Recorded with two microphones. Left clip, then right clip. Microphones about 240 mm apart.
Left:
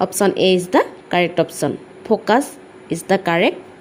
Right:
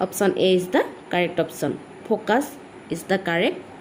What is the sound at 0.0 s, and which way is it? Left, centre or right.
A woman's voice, left.